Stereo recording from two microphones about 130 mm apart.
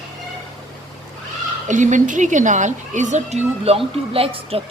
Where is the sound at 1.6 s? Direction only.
75° right (ahead or behind).